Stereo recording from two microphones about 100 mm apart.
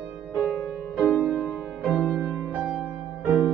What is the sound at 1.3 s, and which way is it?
Music, centre (ahead or behind).